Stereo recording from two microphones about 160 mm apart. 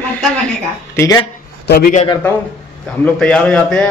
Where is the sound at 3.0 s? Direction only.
5° left (ahead or behind).